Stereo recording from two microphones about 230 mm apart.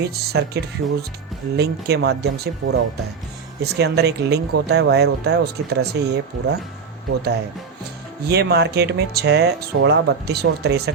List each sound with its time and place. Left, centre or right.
0.0 s speech: right